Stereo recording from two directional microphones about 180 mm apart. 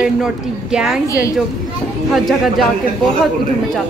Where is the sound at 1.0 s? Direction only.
15° left (ahead or behind).